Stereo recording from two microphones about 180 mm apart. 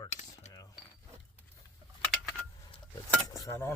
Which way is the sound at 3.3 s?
15° left (ahead or behind).